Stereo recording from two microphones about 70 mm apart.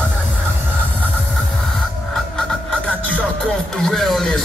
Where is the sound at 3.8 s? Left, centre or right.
Centre.